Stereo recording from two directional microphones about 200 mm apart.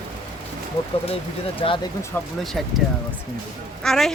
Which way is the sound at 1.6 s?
25° left (ahead or behind).